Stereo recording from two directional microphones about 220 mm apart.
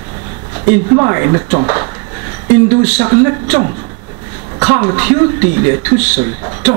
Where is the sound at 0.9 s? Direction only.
20° right (ahead or behind).